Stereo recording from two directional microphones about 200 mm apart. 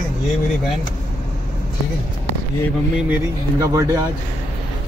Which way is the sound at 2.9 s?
10° right (ahead or behind).